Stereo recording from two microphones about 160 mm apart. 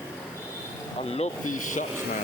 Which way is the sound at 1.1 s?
45° left (ahead or behind).